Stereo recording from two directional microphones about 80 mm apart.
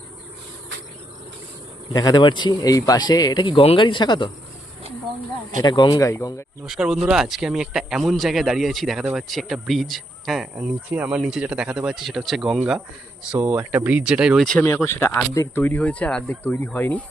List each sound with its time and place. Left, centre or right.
1.9 s speech: left
5.6 s speech: left
6.0 s speech: left
6.7 s speech: centre
11.9 s speech: centre
13.4 s speech: right
14.0 s speech: centre
14.8 s speech: left